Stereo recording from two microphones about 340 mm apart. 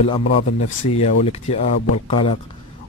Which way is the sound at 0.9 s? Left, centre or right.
Centre.